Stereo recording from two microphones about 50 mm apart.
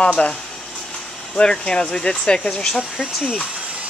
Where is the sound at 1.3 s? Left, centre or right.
Centre.